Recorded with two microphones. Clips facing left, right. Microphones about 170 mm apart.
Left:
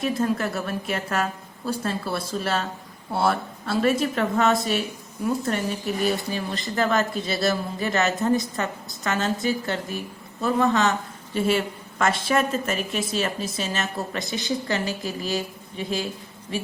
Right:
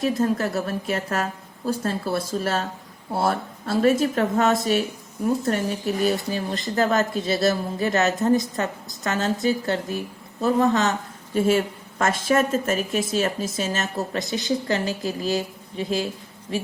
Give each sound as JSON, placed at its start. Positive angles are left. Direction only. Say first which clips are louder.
{"t": 0.0, "sound": "a woman's voice", "louder": "right 2 dB", "side_deg": -40}